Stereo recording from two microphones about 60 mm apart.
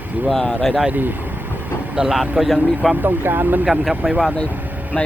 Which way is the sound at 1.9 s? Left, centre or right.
Centre.